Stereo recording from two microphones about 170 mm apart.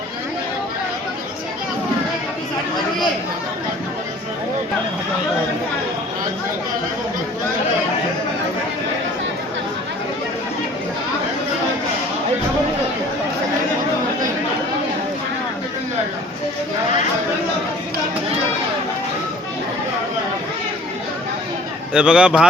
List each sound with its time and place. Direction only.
21.9 s a man's voice: 5° right (ahead or behind)